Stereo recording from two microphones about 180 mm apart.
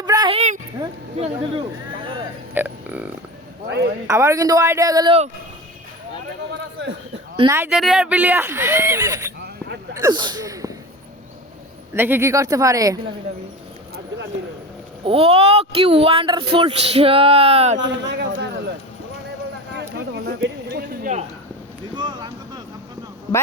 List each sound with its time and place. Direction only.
0.0 s a sound: 20° right (ahead or behind)
0.3 s a sound: 40° right (ahead or behind)
1.1 s speech: 35° right (ahead or behind)
2.6 s speech: 10° right (ahead or behind)
3.7 s speech: 65° right (ahead or behind)
4.0 s speech: 15° right (ahead or behind)
7.5 s speech: 10° right (ahead or behind)
11.9 s speech: 10° right (ahead or behind)
15.0 s speech: 30° right (ahead or behind)
17.8 s speech: 75° right (ahead or behind)
19.7 s a sound: 75° right (ahead or behind)
21.9 s a sound: 25° right (ahead or behind)